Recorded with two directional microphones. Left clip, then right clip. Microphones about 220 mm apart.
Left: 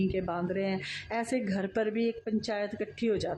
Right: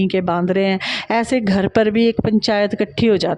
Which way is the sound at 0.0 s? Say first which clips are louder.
Right 13 dB; 45° right (ahead or behind).